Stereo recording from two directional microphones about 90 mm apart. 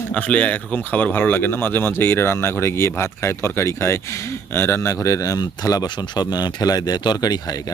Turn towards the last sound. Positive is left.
turn(degrees=50)  # may be behind; listen again after turning